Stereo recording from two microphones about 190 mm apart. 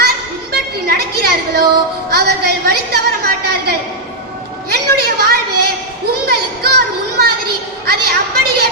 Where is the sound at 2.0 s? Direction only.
55° right (ahead or behind).